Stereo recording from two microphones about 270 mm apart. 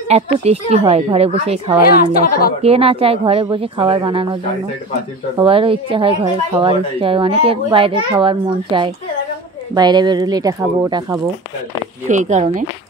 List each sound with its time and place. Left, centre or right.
0.1 s a woman's voice: right
1.8 s a woman's voice: left
2.6 s a woman's voice: right
5.4 s a woman's voice: centre
12.1 s a woman's voice: right